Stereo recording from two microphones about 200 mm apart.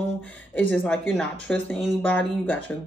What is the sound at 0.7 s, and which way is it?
Speech, 10° left (ahead or behind).